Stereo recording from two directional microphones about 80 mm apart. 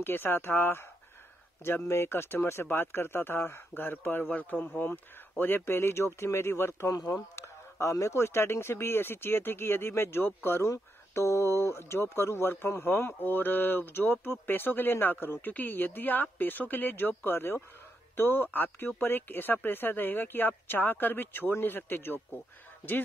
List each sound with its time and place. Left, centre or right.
0.0 s speech: left
6.9 s speech: left